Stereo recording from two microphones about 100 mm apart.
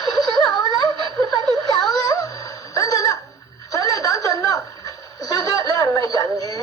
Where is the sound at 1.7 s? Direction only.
35° left (ahead or behind).